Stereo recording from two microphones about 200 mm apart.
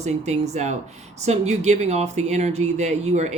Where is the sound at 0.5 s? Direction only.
35° right (ahead or behind).